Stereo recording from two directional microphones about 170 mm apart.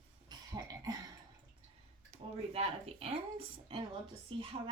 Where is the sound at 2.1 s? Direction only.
35° right (ahead or behind).